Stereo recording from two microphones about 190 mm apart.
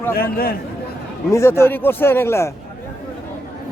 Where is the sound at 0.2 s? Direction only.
55° left (ahead or behind).